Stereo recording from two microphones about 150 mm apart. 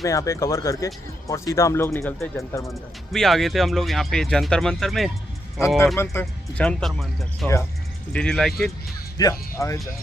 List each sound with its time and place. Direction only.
0.0 s speech: 20° left (ahead or behind)
2.7 s speech: centre (ahead or behind)
9.2 s speech: 20° left (ahead or behind)